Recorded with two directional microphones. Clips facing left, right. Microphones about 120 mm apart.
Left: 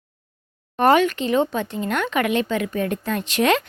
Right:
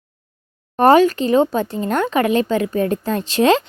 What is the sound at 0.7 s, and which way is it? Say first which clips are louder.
Speech: right 5 dB; 35° right (ahead or behind).